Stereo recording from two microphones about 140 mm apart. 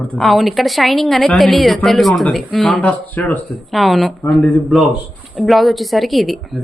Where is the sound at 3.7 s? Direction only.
Centre (ahead or behind).